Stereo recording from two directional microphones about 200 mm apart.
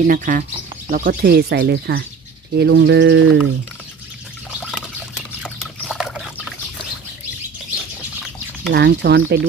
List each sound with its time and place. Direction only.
0.0 s speech: 40° right (ahead or behind)
2.5 s bird: 60° right (ahead or behind)
4.6 s dog: centre (ahead or behind)
8.7 s bird: 55° right (ahead or behind)